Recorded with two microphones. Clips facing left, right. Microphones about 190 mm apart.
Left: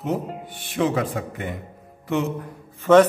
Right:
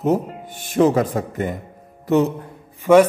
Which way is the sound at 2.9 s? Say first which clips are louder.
Right 2 dB; 10° right (ahead or behind).